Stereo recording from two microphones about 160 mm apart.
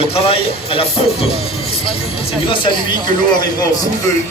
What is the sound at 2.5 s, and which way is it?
Speech, 30° left (ahead or behind).